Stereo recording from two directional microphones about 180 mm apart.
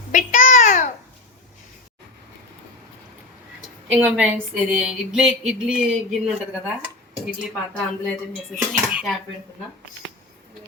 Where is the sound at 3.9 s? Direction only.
10° right (ahead or behind).